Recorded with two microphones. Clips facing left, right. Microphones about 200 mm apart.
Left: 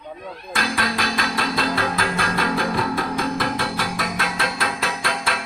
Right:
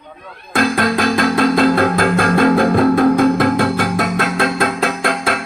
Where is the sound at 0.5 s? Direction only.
50° right (ahead or behind).